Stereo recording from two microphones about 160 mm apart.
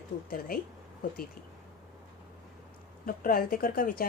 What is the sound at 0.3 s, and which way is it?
Speech, 65° left (ahead or behind).